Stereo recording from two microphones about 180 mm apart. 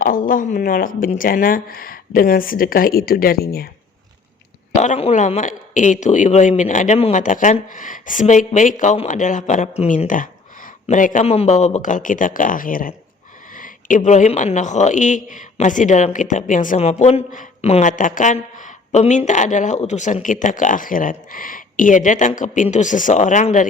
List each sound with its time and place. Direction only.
0.0 s speech: 50° left (ahead or behind)
4.8 s speech: 35° left (ahead or behind)